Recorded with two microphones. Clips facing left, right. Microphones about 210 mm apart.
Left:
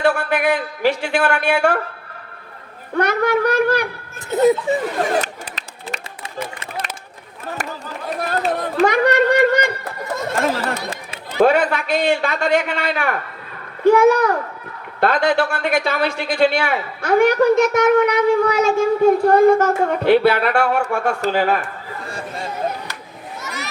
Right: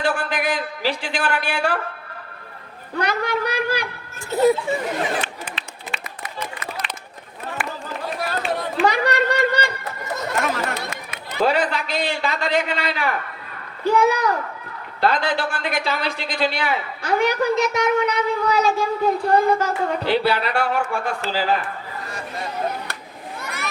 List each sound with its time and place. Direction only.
0.0 s a woman's voice: 55° left (ahead or behind)
3.0 s speech: 55° left (ahead or behind)
4.3 s speech: 20° left (ahead or behind)
5.2 s run: 40° left (ahead or behind)
7.6 s a sound: 40° left (ahead or behind)
8.3 s run: 40° left (ahead or behind)
8.9 s a sound: 55° left (ahead or behind)
10.4 s chatter: 30° left (ahead or behind)
11.3 s a woman's voice: 55° left (ahead or behind)
15.5 s a woman's voice: 55° left (ahead or behind)
23.4 s a sound: 55° right (ahead or behind)